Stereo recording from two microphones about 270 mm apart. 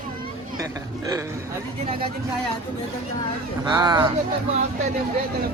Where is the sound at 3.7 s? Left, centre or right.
Centre.